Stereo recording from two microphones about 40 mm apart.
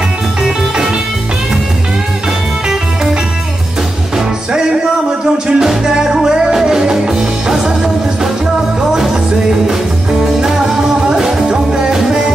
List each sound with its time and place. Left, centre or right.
4.5 s music: centre
10.4 s music: centre
11.5 s music: right